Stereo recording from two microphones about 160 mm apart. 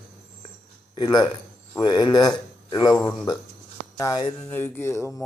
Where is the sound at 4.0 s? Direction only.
25° left (ahead or behind).